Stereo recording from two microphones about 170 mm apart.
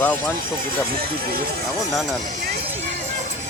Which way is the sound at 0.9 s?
60° right (ahead or behind).